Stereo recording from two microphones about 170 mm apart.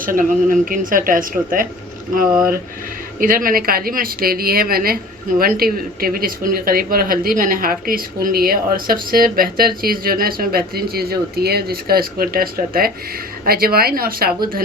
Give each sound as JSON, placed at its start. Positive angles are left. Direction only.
{"t": 0.0, "sound": "speech", "side_deg": -55}
{"t": 3.2, "sound": "speech", "side_deg": -55}